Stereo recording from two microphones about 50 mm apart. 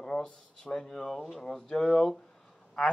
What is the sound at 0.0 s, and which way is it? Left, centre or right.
Speech, centre.